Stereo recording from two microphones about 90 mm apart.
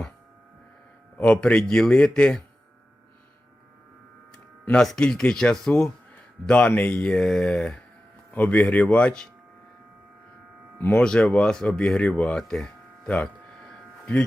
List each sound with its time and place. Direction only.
1.2 s a man's voice: 15° left (ahead or behind)
4.6 s a man's voice: 10° left (ahead or behind)
10.8 s speech: 20° left (ahead or behind)
11.0 s a man's voice: 10° left (ahead or behind)
11.9 s a sound: 10° left (ahead or behind)